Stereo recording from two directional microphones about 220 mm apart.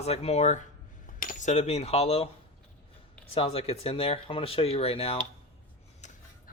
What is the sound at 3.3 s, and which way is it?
Speech, 25° left (ahead or behind).